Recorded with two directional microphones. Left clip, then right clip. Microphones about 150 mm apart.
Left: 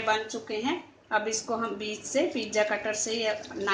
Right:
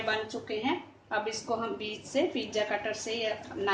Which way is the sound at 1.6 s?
40° left (ahead or behind).